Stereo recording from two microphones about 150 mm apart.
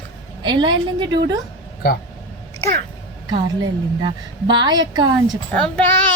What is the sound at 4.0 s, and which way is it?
A woman's voice, 30° right (ahead or behind).